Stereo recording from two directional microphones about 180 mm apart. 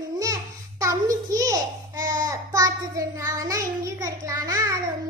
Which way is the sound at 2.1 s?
20° right (ahead or behind).